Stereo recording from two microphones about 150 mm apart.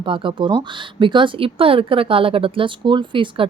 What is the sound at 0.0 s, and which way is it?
Speech, 35° right (ahead or behind).